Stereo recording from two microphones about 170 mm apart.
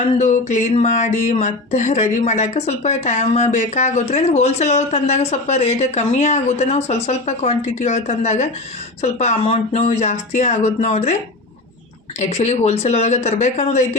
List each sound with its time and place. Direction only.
0.2 s speech: 45° left (ahead or behind)
12.2 s speech: 40° left (ahead or behind)